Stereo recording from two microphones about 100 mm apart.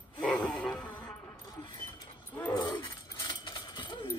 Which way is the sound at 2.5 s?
45° left (ahead or behind).